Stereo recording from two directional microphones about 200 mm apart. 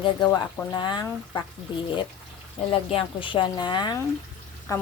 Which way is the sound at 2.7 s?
25° left (ahead or behind).